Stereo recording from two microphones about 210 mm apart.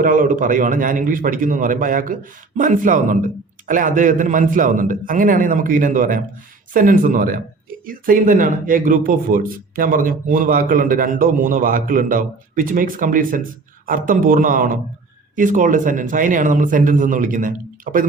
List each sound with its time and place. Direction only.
0.0 s speech: 40° right (ahead or behind)